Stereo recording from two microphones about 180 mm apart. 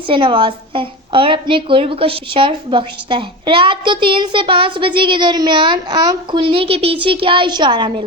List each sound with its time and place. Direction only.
0.1 s a woman's voice: 25° right (ahead or behind)